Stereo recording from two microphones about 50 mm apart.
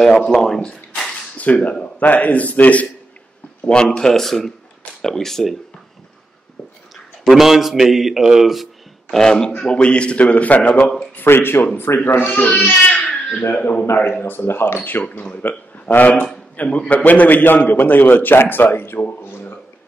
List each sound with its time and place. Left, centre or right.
0.0 s speech: centre
1.4 s a man's voice: left
3.7 s speech: centre
7.2 s a man's voice: centre
9.1 s a man's voice: centre; by 10.7 s left
10.7 s speech: centre
11.1 s a man's voice: left
14.9 s a man's voice: left